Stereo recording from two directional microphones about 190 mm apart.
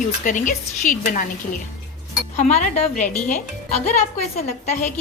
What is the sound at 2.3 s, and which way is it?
Speech, 40° left (ahead or behind).